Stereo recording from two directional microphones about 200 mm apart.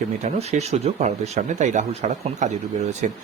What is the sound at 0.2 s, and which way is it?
Speech, 35° right (ahead or behind).